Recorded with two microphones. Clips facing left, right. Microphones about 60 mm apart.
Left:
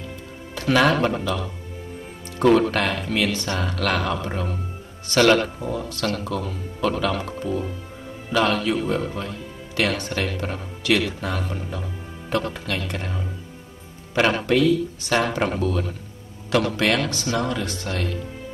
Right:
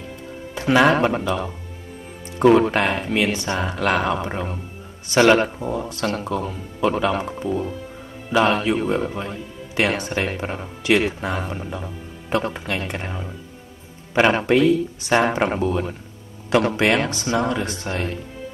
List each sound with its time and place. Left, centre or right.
0.6 s speech: right
2.3 s music: right
2.7 s speech: right
15.0 s speech: right